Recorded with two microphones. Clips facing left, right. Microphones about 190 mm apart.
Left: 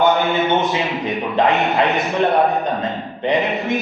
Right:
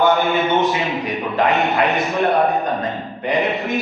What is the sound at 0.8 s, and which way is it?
A man's voice, centre (ahead or behind).